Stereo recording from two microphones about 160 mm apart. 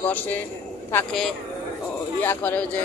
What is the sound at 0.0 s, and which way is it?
Speech, 10° left (ahead or behind).